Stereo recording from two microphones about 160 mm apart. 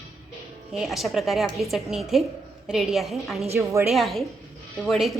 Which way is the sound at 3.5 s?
20° right (ahead or behind).